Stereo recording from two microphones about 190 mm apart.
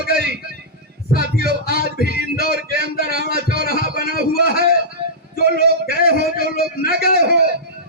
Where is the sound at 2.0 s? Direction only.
60° right (ahead or behind).